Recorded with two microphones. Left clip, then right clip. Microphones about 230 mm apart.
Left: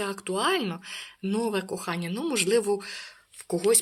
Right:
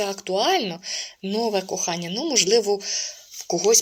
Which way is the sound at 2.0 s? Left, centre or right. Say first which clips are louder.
Right 6 dB; left.